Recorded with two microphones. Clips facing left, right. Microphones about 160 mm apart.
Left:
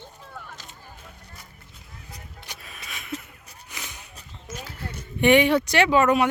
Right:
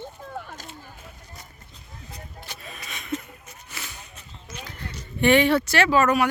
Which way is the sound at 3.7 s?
15° left (ahead or behind).